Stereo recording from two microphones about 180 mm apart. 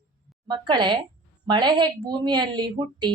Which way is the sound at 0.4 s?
25° right (ahead or behind).